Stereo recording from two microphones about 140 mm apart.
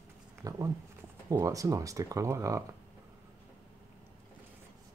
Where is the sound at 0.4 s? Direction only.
25° right (ahead or behind).